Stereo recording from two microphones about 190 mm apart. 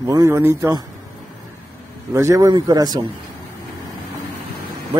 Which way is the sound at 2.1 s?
15° right (ahead or behind).